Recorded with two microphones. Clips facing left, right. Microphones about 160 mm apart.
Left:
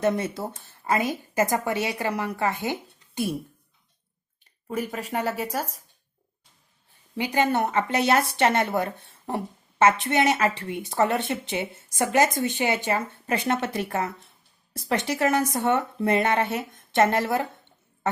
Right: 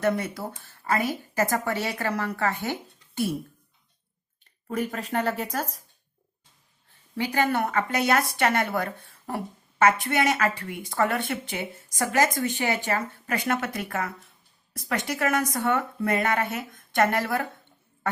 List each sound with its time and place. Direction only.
0.0 s speech: 20° left (ahead or behind)
4.7 s speech: 10° left (ahead or behind)
7.2 s speech: 20° left (ahead or behind)